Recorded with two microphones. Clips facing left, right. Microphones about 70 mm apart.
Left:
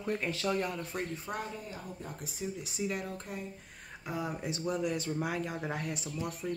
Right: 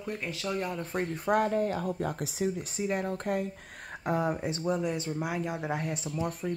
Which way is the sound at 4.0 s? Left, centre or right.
Right.